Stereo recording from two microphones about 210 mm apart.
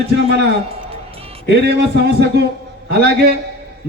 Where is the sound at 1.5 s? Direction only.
50° right (ahead or behind).